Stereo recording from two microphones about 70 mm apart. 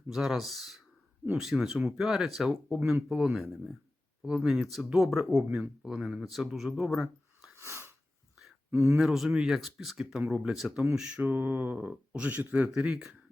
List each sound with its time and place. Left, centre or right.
0.1 s speech: centre
7.5 s sneeze: right
8.7 s speech: right
9.0 s speech: centre
11.2 s speech: right
12.6 s speech: centre